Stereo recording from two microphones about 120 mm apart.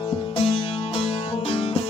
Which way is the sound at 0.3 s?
60° left (ahead or behind).